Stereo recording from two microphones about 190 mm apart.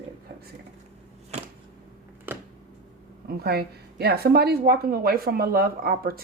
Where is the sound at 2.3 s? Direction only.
10° right (ahead or behind).